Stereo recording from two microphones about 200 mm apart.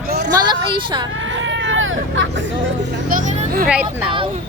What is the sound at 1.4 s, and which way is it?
Hubbub, 65° right (ahead or behind).